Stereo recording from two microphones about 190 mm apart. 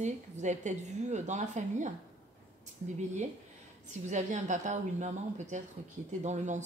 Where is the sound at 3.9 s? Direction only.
40° right (ahead or behind).